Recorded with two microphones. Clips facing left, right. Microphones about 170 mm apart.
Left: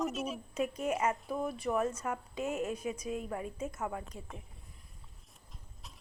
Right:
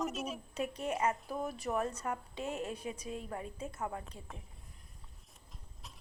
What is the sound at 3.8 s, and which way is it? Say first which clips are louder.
Speech: left 2 dB; 5° left (ahead or behind).